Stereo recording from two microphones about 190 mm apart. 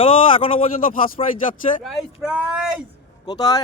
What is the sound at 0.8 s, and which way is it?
Speech, 50° left (ahead or behind).